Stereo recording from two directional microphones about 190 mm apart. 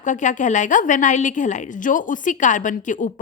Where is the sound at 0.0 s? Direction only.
40° left (ahead or behind).